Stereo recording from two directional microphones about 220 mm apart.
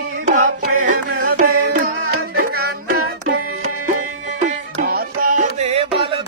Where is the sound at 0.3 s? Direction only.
35° right (ahead or behind).